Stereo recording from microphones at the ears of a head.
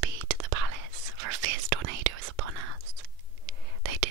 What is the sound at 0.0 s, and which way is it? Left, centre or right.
Whispering, right.